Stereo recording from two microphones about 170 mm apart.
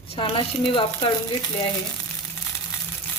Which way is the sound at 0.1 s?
30° left (ahead or behind).